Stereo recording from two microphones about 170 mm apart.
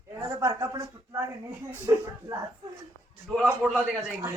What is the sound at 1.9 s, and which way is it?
Speech, 20° right (ahead or behind).